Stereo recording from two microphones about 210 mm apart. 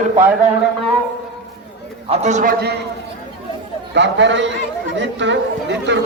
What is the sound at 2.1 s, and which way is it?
Speech, 35° right (ahead or behind).